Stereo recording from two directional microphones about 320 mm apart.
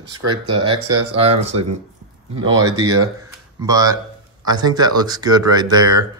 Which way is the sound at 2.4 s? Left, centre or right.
Centre.